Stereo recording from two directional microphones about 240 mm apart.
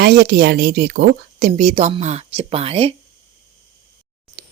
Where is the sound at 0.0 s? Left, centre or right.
Right.